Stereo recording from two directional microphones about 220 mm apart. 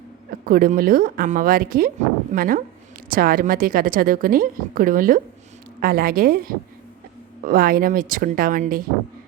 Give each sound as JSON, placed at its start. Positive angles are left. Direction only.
{"t": 0.3, "sound": "speech", "side_deg": -40}